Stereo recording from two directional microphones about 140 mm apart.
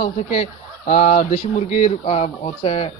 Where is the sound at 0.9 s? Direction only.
60° left (ahead or behind).